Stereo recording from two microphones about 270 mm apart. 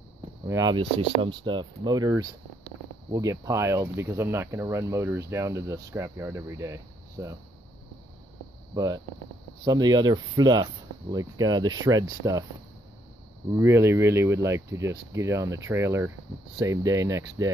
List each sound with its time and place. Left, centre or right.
0.5 s speech: centre
8.7 s speech: centre
13.5 s speech: centre